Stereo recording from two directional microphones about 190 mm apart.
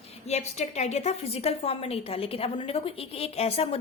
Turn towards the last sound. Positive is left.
turn(degrees=30)  # may be behind; listen again after turning